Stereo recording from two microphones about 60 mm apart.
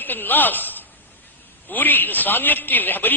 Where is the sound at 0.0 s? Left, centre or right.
Left.